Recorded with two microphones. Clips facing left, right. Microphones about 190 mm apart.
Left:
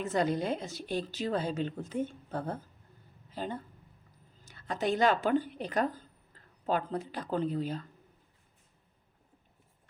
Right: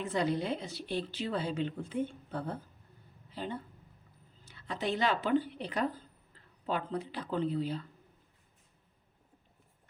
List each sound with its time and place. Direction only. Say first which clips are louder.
0.0 s a woman's voice: left 2 dB; 45° left (ahead or behind)